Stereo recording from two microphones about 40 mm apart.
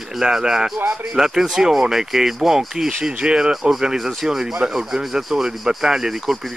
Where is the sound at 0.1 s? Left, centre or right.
Centre.